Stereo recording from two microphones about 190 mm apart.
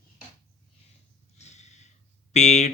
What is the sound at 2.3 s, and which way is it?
Speech, 35° left (ahead or behind).